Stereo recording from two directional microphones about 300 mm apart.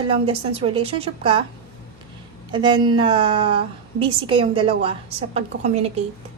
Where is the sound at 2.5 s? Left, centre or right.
Centre.